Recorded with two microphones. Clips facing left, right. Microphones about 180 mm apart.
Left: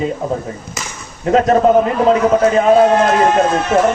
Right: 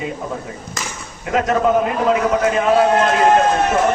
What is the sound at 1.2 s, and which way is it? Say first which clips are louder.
A man's voice: left 6 dB; 35° left (ahead or behind).